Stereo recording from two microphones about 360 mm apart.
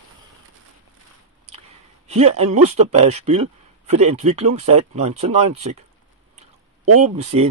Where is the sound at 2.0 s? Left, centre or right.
Centre.